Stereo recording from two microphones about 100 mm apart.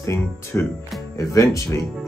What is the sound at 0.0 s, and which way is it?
Speech, 30° left (ahead or behind).